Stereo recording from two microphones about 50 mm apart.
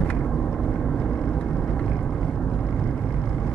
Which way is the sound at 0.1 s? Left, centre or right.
Left.